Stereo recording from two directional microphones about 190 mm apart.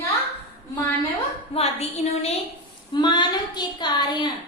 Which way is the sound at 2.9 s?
25° left (ahead or behind).